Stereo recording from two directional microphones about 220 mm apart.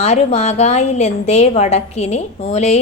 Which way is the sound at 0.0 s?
30° left (ahead or behind).